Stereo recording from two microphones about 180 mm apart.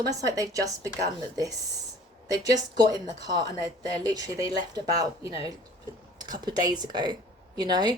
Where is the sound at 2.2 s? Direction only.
20° right (ahead or behind).